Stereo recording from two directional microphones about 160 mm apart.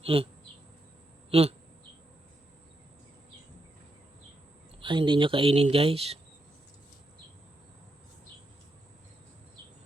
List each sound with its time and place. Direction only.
0.0 s speech: 35° right (ahead or behind)
1.3 s speech: 40° right (ahead or behind)
4.8 s speech: 30° right (ahead or behind)